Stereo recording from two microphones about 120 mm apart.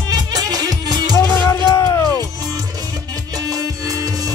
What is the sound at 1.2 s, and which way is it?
Music, 20° left (ahead or behind).